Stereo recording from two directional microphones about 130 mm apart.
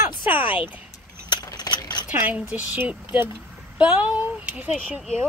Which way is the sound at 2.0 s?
10° right (ahead or behind).